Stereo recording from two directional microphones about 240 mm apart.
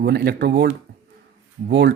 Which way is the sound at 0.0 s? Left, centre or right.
Right.